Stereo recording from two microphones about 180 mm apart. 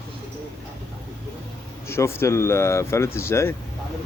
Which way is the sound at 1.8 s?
15° left (ahead or behind).